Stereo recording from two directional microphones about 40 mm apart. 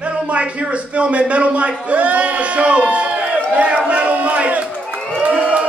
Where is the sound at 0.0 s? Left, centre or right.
Right.